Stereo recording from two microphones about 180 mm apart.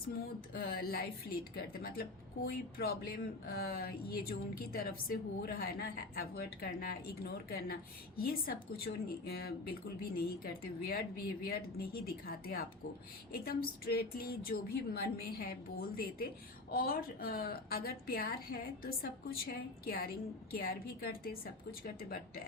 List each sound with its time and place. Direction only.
0.5 s speech: 55° left (ahead or behind)